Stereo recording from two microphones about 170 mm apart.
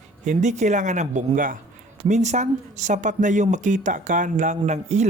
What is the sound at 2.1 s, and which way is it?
Speech, 45° right (ahead or behind).